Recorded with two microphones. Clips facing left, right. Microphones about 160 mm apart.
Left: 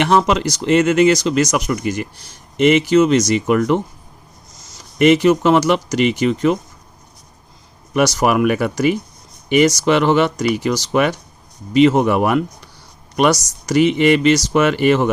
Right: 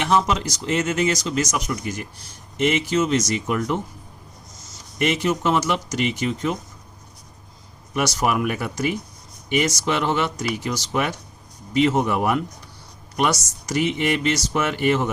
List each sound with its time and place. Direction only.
0.0 s speech: 70° left (ahead or behind)
4.9 s speech: 90° left
7.9 s speech: 85° left